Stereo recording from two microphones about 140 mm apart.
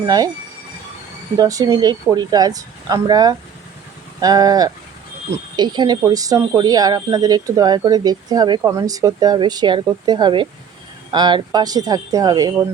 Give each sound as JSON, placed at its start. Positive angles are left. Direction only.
{"t": 0.0, "sound": "speech", "side_deg": -30}
{"t": 1.4, "sound": "speech", "side_deg": -25}